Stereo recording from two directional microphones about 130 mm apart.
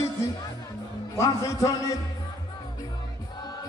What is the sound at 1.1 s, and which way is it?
Speech, 25° left (ahead or behind).